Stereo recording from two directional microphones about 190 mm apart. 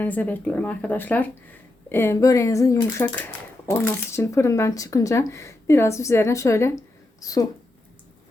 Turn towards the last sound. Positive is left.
turn(degrees=20)  # may be behind; listen again after turning